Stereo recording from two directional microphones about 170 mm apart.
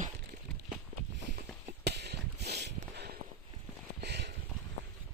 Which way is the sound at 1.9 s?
75° right (ahead or behind).